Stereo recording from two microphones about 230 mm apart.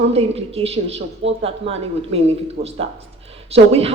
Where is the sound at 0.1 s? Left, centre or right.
Right.